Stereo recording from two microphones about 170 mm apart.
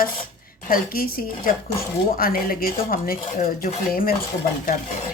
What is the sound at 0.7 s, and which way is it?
Speech, 60° left (ahead or behind).